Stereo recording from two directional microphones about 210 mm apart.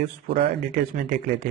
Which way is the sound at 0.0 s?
40° right (ahead or behind).